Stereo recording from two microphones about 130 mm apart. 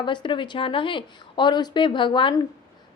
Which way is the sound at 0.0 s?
35° left (ahead or behind).